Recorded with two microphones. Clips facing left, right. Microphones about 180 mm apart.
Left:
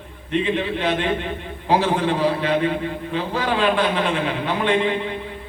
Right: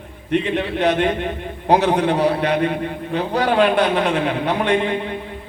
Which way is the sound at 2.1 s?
70° right (ahead or behind).